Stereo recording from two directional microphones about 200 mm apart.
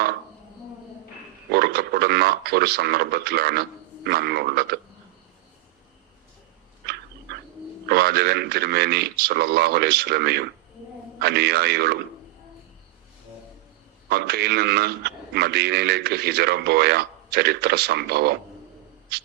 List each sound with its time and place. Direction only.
1.5 s speech: 55° right (ahead or behind)
7.3 s a sound: 55° right (ahead or behind)
7.9 s a man's voice: 55° right (ahead or behind)
14.1 s a man's voice: 55° right (ahead or behind)